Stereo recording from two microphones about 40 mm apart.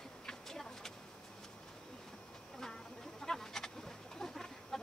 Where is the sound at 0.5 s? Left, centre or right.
Centre.